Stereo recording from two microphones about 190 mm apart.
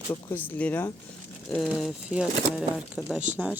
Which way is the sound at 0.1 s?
10° left (ahead or behind).